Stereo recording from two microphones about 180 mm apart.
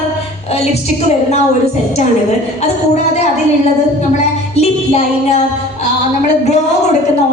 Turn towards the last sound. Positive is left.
turn(degrees=35)  # may be behind; listen again after turning